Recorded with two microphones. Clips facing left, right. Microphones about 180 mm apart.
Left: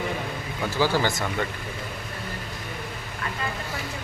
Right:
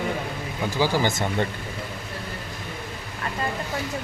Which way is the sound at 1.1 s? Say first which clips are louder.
Right 3 dB; 25° right (ahead or behind).